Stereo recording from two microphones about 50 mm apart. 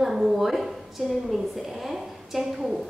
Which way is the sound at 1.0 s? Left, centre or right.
Centre.